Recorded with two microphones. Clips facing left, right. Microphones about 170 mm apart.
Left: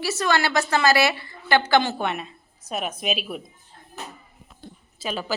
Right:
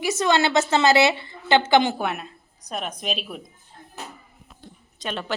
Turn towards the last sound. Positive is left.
turn(degrees=5)  # may be behind; listen again after turning